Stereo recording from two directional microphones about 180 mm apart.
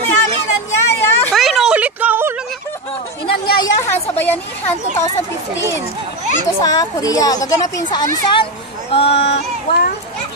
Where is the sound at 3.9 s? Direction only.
10° left (ahead or behind).